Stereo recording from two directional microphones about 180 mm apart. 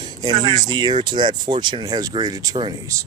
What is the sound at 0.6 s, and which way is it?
Speech, 25° right (ahead or behind).